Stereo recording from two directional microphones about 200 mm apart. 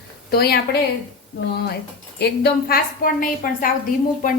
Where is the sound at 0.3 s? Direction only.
50° left (ahead or behind).